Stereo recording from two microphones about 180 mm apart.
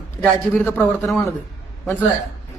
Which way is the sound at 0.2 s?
10° left (ahead or behind).